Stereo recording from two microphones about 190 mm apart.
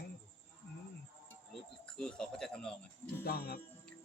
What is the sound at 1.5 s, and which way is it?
Speech, 5° left (ahead or behind).